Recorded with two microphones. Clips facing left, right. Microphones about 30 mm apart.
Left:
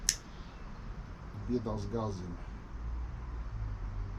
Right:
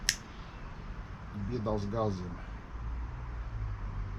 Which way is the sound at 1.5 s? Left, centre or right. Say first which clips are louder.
Right 1 dB; right.